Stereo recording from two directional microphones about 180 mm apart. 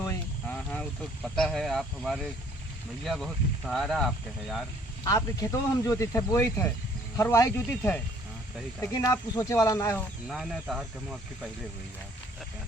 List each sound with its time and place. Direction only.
0.0 s speech: 10° left (ahead or behind)
5.0 s speech: 20° left (ahead or behind)
10.2 s speech: centre (ahead or behind)